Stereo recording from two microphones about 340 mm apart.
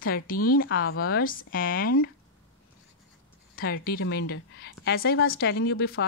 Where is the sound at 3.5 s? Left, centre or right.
Left.